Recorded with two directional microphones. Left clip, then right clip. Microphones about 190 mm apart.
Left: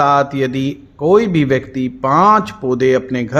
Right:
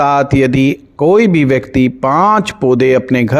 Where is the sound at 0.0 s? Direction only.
40° right (ahead or behind).